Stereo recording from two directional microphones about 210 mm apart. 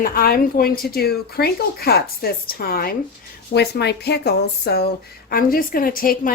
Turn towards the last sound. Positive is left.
turn(degrees=40)  # may be behind; listen again after turning